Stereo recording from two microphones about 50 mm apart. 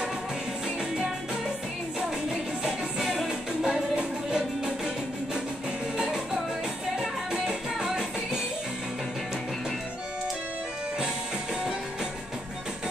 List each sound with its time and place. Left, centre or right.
2.6 s music: centre
3.3 s music: centre
7.0 s music: centre